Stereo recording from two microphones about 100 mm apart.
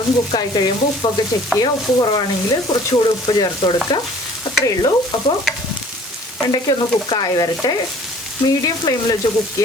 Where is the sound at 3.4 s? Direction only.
50° left (ahead or behind).